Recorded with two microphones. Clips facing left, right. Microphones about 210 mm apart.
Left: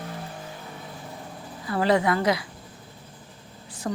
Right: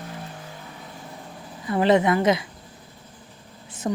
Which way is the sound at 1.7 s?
20° right (ahead or behind).